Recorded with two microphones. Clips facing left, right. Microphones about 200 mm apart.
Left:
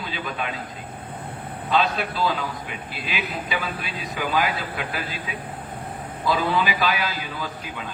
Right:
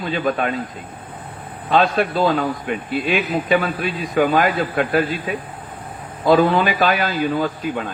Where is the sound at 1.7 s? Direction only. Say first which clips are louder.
Right 6 dB; 50° right (ahead or behind).